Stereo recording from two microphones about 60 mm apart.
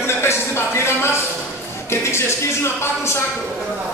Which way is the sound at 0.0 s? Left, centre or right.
Left.